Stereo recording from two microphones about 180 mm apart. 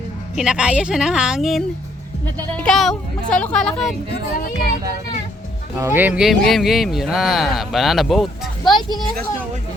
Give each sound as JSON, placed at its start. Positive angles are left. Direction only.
{"t": 0.3, "sound": "speech", "side_deg": -5}
{"t": 4.4, "sound": "speech", "side_deg": 55}
{"t": 5.8, "sound": "speech", "side_deg": -10}
{"t": 8.6, "sound": "speech", "side_deg": 25}